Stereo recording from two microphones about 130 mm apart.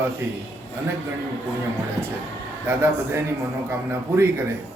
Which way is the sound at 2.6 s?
20° right (ahead or behind).